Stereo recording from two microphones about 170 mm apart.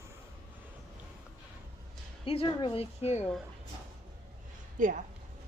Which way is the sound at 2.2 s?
30° left (ahead or behind).